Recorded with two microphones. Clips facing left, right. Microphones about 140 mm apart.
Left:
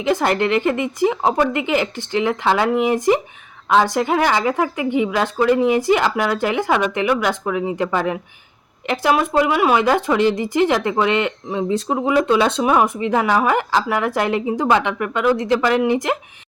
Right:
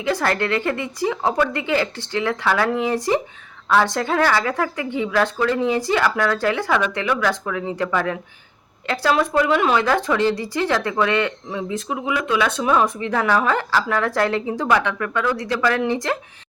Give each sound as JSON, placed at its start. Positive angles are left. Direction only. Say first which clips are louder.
{"t": 0.0, "sound": "speech", "louder": "left 3 dB", "side_deg": 20}
{"t": 11.7, "sound": "speech", "louder": "left 7 dB", "side_deg": 35}
{"t": 12.6, "sound": "speech", "louder": "left 2 dB", "side_deg": 15}